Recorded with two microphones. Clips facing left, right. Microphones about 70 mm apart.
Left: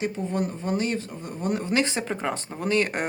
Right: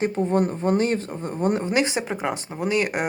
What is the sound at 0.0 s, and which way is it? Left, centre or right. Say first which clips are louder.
Speech: right 6 dB; right.